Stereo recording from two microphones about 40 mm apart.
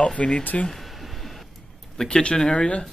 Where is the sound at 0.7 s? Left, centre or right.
Centre.